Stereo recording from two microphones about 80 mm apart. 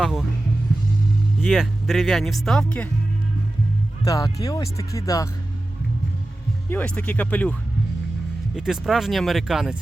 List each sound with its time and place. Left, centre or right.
0.0 s speech: centre
1.4 s speech: centre
4.0 s speech: left
6.7 s speech: left
8.5 s speech: centre